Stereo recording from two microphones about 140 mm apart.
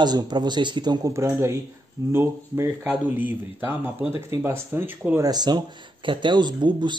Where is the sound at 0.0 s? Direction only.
30° right (ahead or behind).